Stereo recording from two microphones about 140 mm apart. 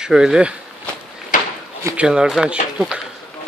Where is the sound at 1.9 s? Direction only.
5° right (ahead or behind).